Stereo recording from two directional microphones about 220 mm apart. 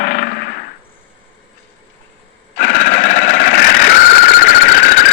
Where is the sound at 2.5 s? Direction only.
45° left (ahead or behind).